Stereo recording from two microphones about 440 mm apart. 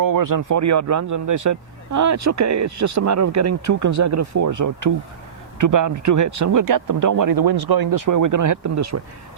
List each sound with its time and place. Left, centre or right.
0.0 s speech: right